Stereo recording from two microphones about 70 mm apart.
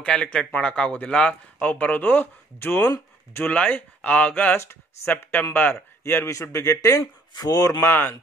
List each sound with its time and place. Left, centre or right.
0.0 s speech: centre
1.7 s speech: left
3.5 s speech: left
4.6 s speech: left
6.0 s speech: left
7.3 s speech: left
7.8 s speech: left